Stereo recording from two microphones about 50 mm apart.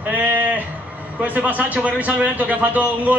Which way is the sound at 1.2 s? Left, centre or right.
Right.